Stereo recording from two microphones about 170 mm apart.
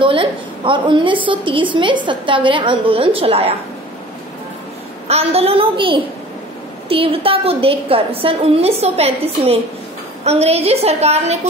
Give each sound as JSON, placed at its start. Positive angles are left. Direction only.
{"t": 0.0, "sound": "a woman's voice", "side_deg": -30}
{"t": 5.0, "sound": "a woman's voice", "side_deg": -35}